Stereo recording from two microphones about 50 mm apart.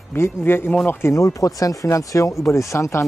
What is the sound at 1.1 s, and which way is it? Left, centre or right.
Speech, left.